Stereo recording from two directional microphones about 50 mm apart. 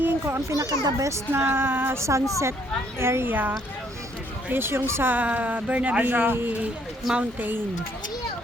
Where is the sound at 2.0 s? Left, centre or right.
Right.